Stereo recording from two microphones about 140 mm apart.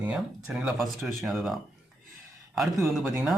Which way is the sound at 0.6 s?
Centre (ahead or behind).